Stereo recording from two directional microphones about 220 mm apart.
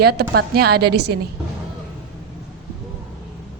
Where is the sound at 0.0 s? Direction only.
45° right (ahead or behind).